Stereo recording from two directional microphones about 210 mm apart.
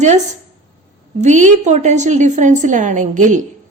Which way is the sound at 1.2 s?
35° right (ahead or behind).